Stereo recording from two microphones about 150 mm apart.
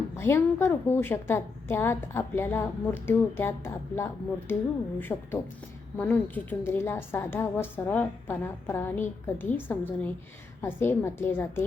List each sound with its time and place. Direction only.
0.2 s a woman's voice: 15° left (ahead or behind)